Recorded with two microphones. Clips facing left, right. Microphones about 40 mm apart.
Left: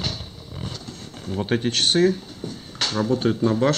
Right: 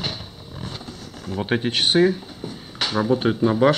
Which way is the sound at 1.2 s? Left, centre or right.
Centre.